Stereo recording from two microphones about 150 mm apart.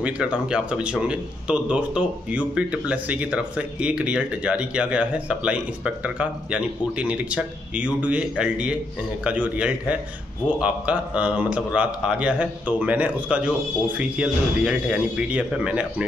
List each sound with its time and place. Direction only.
0.0 s speech: 5° right (ahead or behind)